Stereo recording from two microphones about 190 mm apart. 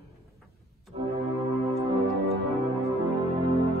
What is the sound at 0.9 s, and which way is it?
Music, 30° right (ahead or behind).